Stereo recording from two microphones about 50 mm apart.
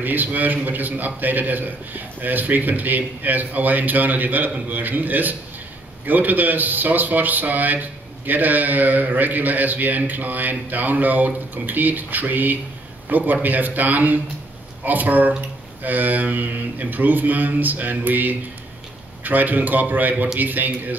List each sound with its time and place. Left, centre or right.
0.0 s a man's voice: right